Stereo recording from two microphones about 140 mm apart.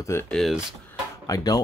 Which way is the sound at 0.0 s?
20° left (ahead or behind).